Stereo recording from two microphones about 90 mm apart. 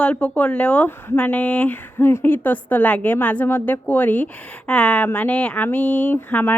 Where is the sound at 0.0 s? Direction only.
15° left (ahead or behind).